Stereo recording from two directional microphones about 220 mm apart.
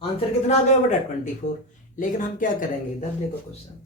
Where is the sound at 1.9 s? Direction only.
35° left (ahead or behind).